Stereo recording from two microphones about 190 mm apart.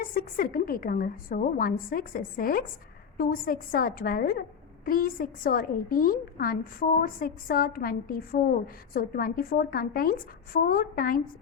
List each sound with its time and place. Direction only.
0.0 s a woman's voice: 50° left (ahead or behind)